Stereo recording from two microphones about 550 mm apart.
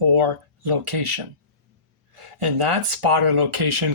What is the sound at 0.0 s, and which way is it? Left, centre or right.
Speech, right.